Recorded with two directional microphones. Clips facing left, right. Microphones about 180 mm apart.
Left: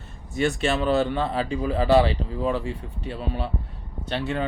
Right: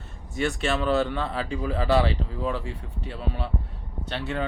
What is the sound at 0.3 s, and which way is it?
Speech, 25° left (ahead or behind).